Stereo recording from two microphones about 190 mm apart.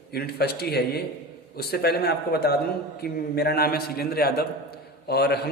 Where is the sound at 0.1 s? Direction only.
55° left (ahead or behind).